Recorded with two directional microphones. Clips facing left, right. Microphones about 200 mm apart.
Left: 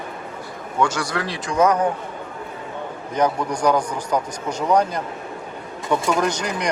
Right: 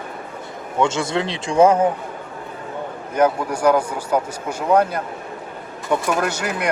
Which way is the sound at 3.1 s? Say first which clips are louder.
Right 3 dB; 5° right (ahead or behind).